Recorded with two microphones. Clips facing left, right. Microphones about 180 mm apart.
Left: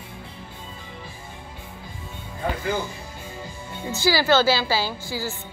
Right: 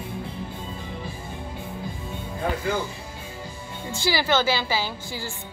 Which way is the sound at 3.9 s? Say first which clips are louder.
Left 4 dB; 25° right (ahead or behind).